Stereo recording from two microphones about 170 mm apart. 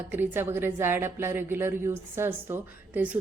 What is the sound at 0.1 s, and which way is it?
A woman's voice, 10° right (ahead or behind).